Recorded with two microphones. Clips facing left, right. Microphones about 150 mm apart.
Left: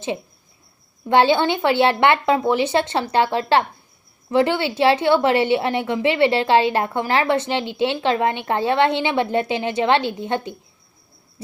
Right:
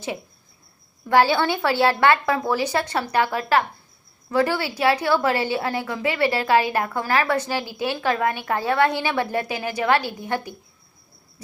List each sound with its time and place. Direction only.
1.0 s a woman's voice: 20° left (ahead or behind)